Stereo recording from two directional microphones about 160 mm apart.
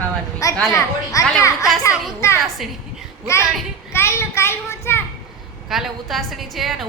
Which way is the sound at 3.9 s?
15° left (ahead or behind).